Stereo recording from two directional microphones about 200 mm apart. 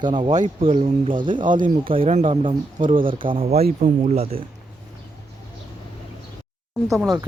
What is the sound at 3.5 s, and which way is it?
Speech, 50° right (ahead or behind).